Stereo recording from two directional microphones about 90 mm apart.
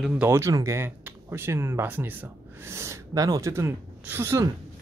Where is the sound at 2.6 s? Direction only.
30° right (ahead or behind).